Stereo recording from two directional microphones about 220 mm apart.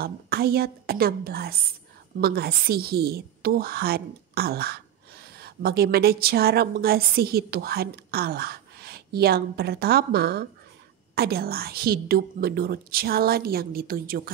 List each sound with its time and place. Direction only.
0.0 s a woman's voice: 45° right (ahead or behind)